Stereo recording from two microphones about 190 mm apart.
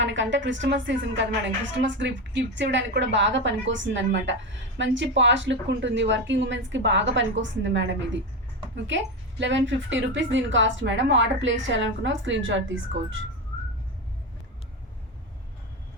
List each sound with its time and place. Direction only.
0.0 s a woman's voice: 70° right (ahead or behind)
9.4 s a woman's voice: 75° right (ahead or behind)